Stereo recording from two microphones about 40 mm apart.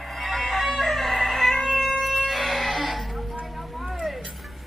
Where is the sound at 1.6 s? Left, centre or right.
Centre.